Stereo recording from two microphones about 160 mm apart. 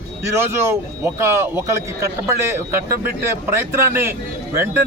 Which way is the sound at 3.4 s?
15° right (ahead or behind).